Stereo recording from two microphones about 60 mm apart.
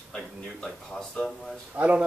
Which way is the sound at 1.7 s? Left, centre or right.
Right.